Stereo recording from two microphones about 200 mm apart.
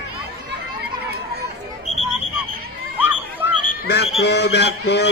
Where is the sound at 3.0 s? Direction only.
10° right (ahead or behind).